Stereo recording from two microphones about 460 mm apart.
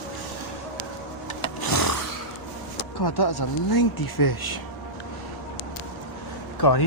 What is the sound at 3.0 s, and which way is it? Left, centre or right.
Speech, left.